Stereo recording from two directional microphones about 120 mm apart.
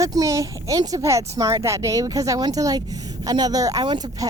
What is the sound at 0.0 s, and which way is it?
Speech, 30° right (ahead or behind).